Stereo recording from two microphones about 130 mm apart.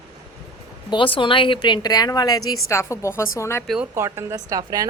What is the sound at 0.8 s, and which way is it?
A woman's voice, 40° left (ahead or behind).